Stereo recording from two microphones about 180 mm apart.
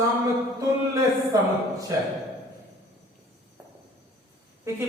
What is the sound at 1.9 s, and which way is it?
Speech, 15° right (ahead or behind).